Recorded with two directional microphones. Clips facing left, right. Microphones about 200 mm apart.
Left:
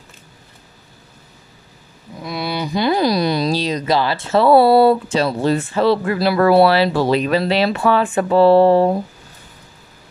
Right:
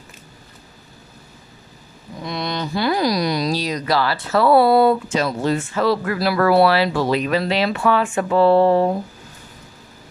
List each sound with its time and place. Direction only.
2.1 s speech: 5° left (ahead or behind); by 8.8 s 30° left (ahead or behind)